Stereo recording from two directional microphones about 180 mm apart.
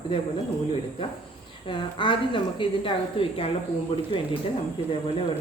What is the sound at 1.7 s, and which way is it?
A woman's voice, 30° left (ahead or behind).